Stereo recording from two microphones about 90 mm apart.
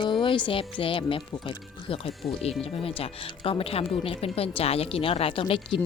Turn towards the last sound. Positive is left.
turn(degrees=80)